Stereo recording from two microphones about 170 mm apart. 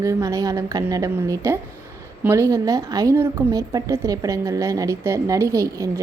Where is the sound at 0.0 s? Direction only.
20° right (ahead or behind).